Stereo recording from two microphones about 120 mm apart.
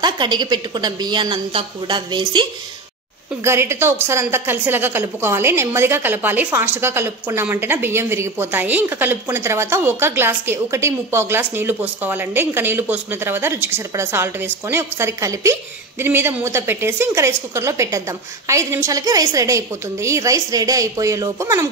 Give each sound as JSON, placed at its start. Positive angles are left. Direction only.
{"t": 0.0, "sound": "a woman's voice", "side_deg": -40}
{"t": 3.4, "sound": "a woman's voice", "side_deg": -20}